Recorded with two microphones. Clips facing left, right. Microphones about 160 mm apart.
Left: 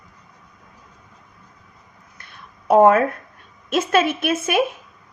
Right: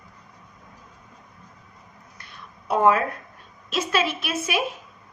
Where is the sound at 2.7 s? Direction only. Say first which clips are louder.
Left 7 dB; 50° left (ahead or behind).